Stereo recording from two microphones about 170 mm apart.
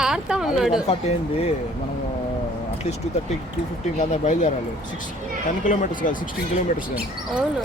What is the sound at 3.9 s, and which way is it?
Speech, 45° left (ahead or behind).